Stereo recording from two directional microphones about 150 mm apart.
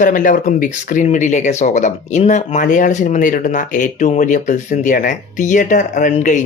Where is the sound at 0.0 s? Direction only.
60° left (ahead or behind).